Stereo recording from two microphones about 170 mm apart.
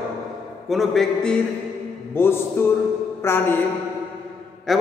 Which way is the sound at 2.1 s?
15° left (ahead or behind).